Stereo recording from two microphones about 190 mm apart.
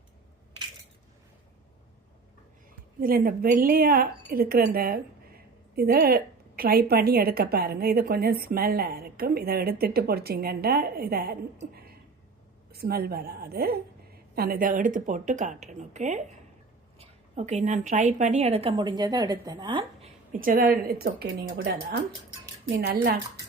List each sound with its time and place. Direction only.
3.0 s a woman's voice: 50° right (ahead or behind)
12.7 s a woman's voice: 55° right (ahead or behind); by 20.1 s 25° right (ahead or behind)
20.3 s a woman's voice: 45° right (ahead or behind)